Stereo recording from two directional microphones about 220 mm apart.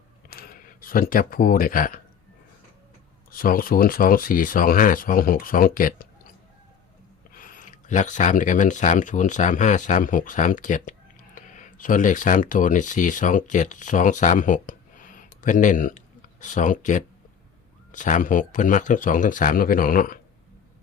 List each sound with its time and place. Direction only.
0.3 s speech: 45° left (ahead or behind)
3.3 s speech: 40° left (ahead or behind)
7.3 s speech: 40° left (ahead or behind)